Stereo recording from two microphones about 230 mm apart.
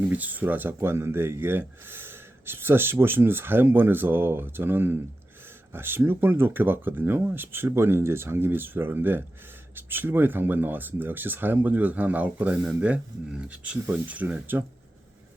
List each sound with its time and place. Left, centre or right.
0.1 s speech: centre